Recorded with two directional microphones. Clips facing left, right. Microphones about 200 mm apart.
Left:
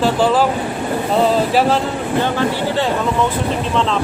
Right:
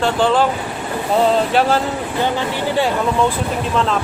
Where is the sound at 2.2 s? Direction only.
15° right (ahead or behind).